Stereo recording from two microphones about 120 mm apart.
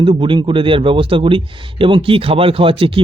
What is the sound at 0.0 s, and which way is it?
Speech, 45° right (ahead or behind).